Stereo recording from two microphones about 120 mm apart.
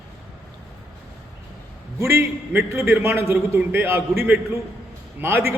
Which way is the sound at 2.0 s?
20° right (ahead or behind).